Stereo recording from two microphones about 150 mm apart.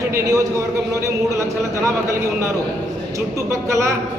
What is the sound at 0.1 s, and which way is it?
Speech, 25° right (ahead or behind).